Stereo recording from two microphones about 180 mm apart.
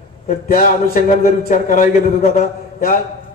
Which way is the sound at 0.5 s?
55° left (ahead or behind).